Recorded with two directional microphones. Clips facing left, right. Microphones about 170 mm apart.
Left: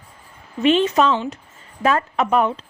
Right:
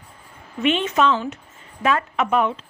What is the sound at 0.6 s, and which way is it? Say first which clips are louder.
A woman's voice: left 3 dB; 35° left (ahead or behind).